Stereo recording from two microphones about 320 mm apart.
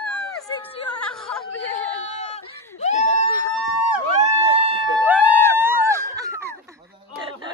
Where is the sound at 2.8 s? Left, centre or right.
Left.